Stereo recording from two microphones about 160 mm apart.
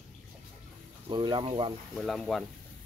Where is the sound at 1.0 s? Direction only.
30° right (ahead or behind).